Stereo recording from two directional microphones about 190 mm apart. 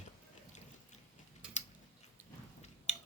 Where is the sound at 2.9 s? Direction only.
35° left (ahead or behind).